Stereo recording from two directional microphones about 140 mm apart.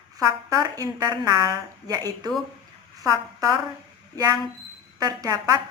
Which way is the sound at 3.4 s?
25° right (ahead or behind).